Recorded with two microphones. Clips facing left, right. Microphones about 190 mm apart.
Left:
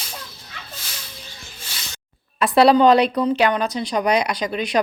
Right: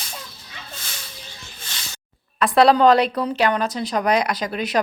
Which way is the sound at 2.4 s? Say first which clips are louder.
Left 1 dB; 5° left (ahead or behind).